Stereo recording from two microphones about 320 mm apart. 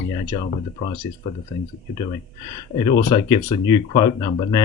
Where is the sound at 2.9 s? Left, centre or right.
Centre.